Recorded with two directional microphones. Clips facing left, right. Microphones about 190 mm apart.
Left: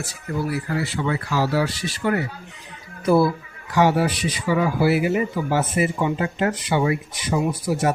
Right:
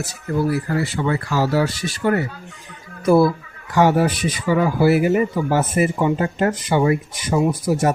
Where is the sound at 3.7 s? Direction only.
50° right (ahead or behind).